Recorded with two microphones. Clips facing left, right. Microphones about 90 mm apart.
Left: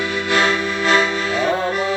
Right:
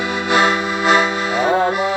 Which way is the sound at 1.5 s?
25° right (ahead or behind).